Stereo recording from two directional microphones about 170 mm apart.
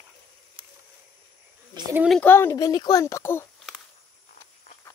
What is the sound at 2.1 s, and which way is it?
Speech, 10° left (ahead or behind).